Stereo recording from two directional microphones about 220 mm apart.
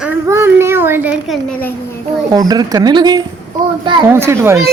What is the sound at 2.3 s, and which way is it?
A woman's voice, 15° right (ahead or behind).